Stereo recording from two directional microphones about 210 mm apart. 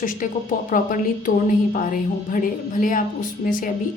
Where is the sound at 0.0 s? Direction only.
40° left (ahead or behind).